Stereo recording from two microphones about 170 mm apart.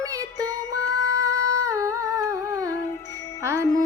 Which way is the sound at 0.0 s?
20° right (ahead or behind).